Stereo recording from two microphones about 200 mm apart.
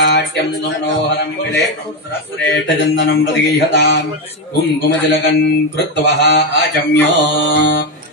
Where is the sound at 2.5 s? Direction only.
60° left (ahead or behind).